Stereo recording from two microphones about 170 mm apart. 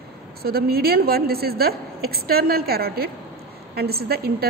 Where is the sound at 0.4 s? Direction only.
65° right (ahead or behind).